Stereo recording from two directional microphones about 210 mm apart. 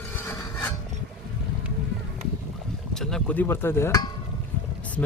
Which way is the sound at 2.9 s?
Centre (ahead or behind).